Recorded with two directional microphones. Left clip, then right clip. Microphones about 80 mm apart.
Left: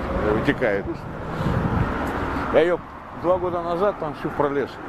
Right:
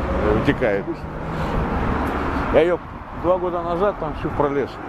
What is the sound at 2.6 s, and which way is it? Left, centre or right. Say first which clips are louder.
Speech: right 2 dB; centre.